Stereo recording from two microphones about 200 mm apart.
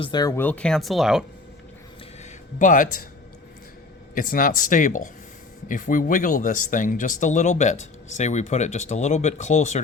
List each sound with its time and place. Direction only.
0.0 s speech: 20° left (ahead or behind); by 1.2 s centre (ahead or behind)
2.6 s speech: 40° left (ahead or behind)
4.1 s speech: 45° left (ahead or behind)